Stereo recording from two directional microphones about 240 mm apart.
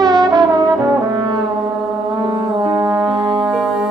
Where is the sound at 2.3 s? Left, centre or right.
Centre.